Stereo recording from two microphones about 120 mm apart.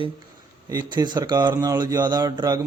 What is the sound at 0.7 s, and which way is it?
Speech, 35° right (ahead or behind).